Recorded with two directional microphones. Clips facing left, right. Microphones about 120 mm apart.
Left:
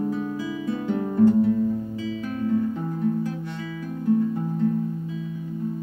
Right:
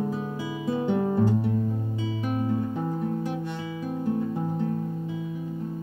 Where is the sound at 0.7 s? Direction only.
20° right (ahead or behind).